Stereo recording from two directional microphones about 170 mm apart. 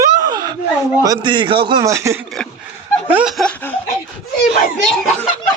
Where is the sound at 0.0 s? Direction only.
25° right (ahead or behind).